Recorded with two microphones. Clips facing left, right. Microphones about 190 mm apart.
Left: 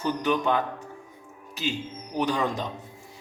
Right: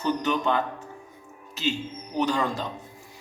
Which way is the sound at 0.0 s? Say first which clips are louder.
Even; 10° left (ahead or behind).